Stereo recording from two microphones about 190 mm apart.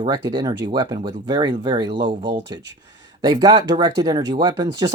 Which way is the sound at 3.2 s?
20° right (ahead or behind).